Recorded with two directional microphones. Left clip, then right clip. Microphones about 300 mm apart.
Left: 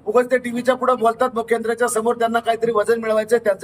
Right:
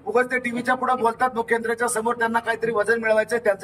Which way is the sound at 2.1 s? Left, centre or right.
Centre.